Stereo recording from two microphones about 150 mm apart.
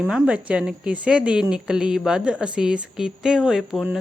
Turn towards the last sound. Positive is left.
turn(degrees=0)  # may be behind; listen again after turning